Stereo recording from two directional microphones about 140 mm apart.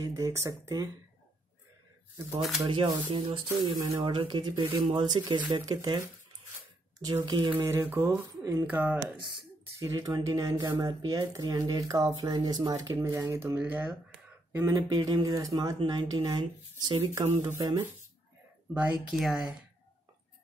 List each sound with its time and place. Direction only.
0.0 s speech: 20° right (ahead or behind)
2.7 s speech: 35° right (ahead or behind)
7.2 s speech: 35° right (ahead or behind)
7.9 s speech: 15° right (ahead or behind)
18.7 s speech: 10° right (ahead or behind)